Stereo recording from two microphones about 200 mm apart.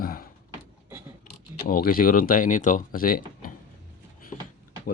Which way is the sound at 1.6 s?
45° left (ahead or behind).